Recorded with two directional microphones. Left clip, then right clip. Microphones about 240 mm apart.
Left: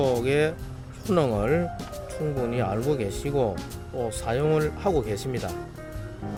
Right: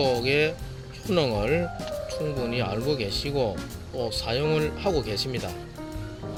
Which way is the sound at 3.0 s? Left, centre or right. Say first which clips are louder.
Right 1 dB; left.